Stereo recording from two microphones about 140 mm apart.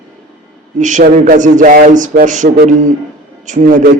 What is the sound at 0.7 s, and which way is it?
A man's voice, 65° right (ahead or behind).